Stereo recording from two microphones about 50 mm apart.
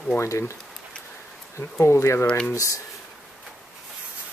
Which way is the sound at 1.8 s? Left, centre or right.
Left.